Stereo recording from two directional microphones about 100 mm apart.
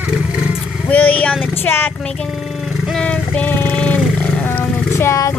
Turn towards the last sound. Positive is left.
turn(degrees=30)  # may be behind; listen again after turning